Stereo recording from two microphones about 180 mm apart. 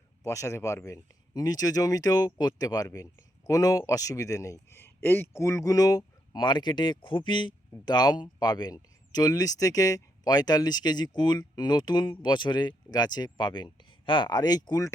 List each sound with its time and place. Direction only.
0.2 s speech: 15° left (ahead or behind)